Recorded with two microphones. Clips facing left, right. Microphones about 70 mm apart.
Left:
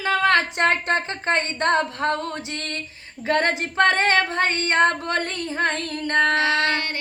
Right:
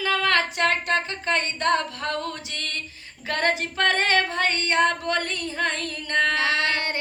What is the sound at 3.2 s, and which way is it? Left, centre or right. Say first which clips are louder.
Speech: left 4 dB; left.